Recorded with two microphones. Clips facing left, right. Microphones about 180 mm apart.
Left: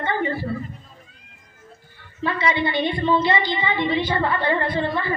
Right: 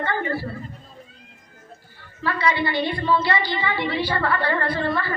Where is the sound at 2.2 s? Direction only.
20° left (ahead or behind).